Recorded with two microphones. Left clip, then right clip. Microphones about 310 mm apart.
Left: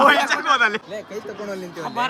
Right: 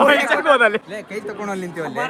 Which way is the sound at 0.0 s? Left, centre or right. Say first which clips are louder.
Right 1 dB; centre.